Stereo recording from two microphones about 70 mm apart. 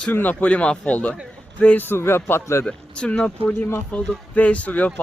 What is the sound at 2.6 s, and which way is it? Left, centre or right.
Speech, centre.